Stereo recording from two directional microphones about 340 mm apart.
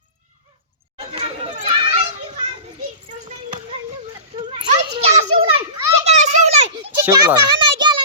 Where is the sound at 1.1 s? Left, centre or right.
Centre.